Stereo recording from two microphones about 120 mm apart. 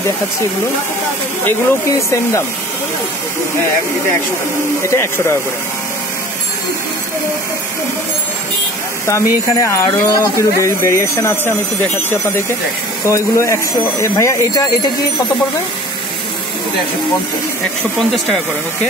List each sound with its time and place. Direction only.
1.4 s speech: 25° left (ahead or behind)
4.8 s speech: 20° left (ahead or behind)
9.0 s speech: 25° left (ahead or behind)
13.0 s speech: 25° left (ahead or behind)